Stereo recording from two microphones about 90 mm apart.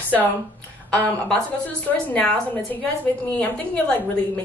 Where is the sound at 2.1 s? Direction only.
15° left (ahead or behind).